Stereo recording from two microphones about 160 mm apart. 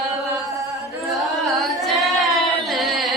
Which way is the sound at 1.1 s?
Centre (ahead or behind).